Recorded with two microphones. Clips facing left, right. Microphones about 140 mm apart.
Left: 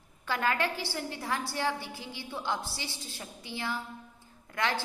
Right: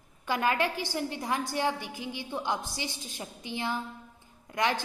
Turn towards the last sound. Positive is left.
turn(degrees=-15)  # may be behind; listen again after turning